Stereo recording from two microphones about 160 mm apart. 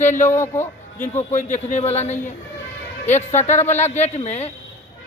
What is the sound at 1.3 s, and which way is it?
Speech, 50° left (ahead or behind).